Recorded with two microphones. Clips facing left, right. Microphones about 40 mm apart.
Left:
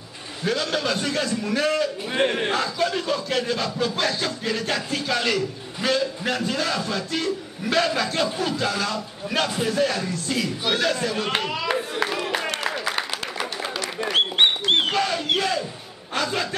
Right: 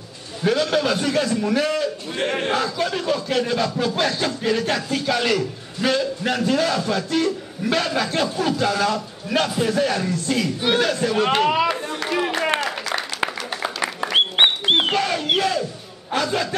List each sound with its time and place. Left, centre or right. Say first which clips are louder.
0.5 s a man's voice: right 5 dB; centre
2.2 s speech: left 2 dB; centre
2.5 s a man's voice: right 1 dB; centre
10.9 s a man's voice: right 4 dB; centre
11.7 s clapping: left 2 dB; centre
12.5 s applause: right 2 dB; centre
14.1 s a sound: right 2 dB; right
15.0 s a sound: right 2 dB; centre
16.1 s a man's voice: right 3 dB; centre